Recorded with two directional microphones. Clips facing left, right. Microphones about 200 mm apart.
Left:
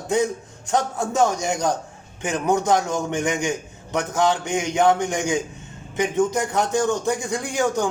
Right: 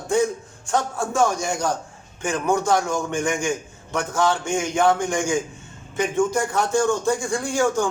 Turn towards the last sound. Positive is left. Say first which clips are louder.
# right 1 dB
turn(degrees=20)  # may be behind; listen again after turning